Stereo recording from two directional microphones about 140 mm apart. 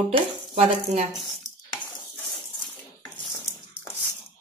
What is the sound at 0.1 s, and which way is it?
Speech, 50° right (ahead or behind).